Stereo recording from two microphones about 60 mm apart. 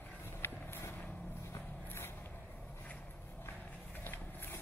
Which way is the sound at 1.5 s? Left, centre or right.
Left.